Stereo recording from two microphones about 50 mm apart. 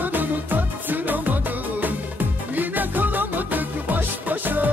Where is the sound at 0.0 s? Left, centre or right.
Right.